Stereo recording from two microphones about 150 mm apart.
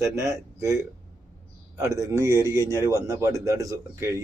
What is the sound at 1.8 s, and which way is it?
Speech, 20° right (ahead or behind).